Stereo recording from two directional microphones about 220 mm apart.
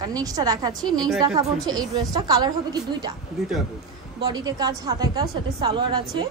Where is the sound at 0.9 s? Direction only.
Centre (ahead or behind).